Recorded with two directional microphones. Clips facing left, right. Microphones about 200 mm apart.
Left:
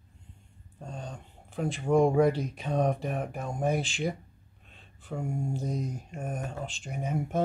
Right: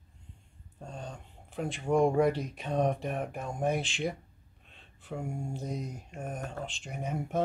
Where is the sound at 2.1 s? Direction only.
Centre (ahead or behind).